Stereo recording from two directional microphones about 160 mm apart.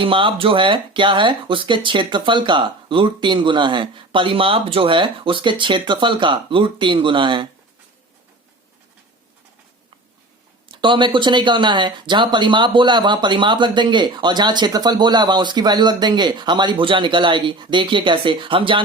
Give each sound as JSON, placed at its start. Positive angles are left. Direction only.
{"t": 0.0, "sound": "speech", "side_deg": -30}
{"t": 10.7, "sound": "speech", "side_deg": -30}